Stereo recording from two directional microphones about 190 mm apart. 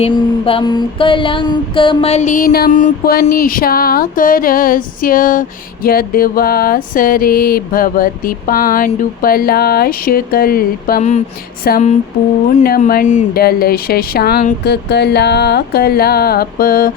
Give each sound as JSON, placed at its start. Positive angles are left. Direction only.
{"t": 0.0, "sound": "mantra", "side_deg": 30}